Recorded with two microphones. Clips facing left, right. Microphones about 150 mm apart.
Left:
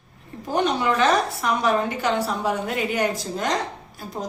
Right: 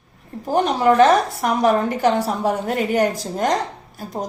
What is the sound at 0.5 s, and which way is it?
A woman's voice, 45° right (ahead or behind).